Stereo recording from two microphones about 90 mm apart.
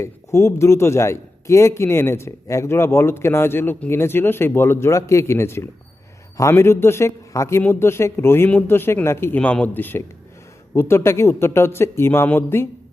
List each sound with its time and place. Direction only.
0.0 s a man's voice: 30° left (ahead or behind)